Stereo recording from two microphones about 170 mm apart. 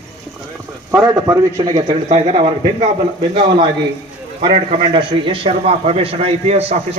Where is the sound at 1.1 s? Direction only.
20° right (ahead or behind).